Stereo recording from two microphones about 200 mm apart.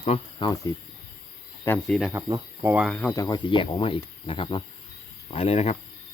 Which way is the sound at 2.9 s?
10° left (ahead or behind).